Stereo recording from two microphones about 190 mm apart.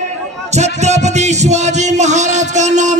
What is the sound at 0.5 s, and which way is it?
Music, 35° right (ahead or behind).